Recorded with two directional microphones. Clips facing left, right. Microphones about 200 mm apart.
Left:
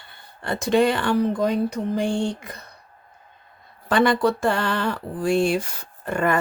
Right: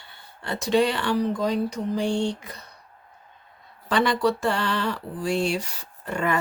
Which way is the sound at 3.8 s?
50° left (ahead or behind).